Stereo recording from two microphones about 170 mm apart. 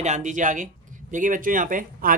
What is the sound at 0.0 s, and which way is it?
A woman's voice, 45° right (ahead or behind).